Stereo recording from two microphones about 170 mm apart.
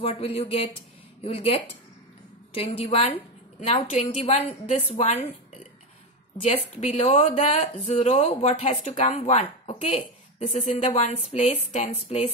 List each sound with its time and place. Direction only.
0.0 s speech: 35° left (ahead or behind)
6.4 s speech: 40° left (ahead or behind)